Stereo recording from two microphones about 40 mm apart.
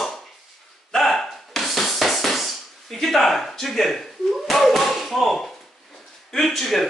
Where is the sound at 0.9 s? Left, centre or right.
Centre.